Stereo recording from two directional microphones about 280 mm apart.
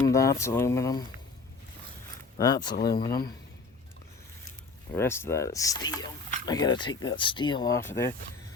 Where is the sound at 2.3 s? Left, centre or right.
Centre.